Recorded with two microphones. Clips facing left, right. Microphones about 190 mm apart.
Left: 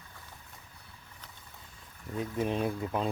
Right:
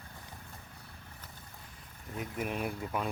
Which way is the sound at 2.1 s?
30° left (ahead or behind).